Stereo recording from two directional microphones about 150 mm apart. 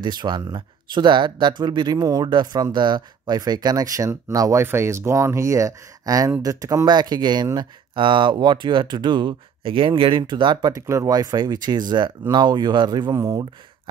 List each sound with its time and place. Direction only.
0.0 s speech: 30° right (ahead or behind)